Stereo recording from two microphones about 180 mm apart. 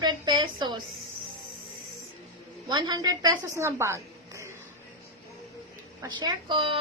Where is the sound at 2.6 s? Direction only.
25° right (ahead or behind).